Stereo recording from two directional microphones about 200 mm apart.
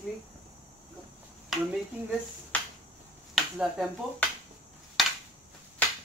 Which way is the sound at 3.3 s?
Centre (ahead or behind).